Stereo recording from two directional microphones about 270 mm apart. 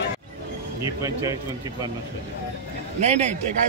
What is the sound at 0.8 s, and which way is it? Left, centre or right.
Speech, centre.